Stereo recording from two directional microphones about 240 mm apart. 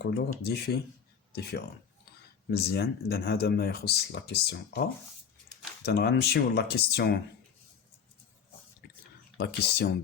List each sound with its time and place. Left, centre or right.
0.0 s speech: left
5.8 s speech: left
9.4 s speech: left